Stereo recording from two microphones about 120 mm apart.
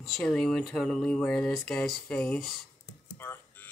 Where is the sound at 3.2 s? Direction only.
20° left (ahead or behind).